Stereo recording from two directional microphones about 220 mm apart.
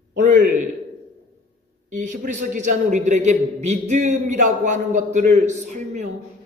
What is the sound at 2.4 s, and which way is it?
A man's voice, 35° right (ahead or behind).